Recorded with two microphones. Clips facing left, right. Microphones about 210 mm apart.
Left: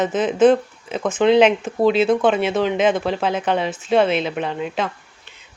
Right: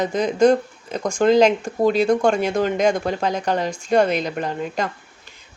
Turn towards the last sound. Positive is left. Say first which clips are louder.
# left 1 dB
turn(degrees=0)  # may be behind; listen again after turning